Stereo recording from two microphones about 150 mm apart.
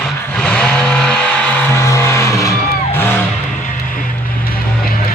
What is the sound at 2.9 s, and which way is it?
Music, 15° left (ahead or behind).